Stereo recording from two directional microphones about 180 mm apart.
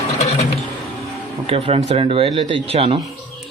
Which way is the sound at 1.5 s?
35° right (ahead or behind).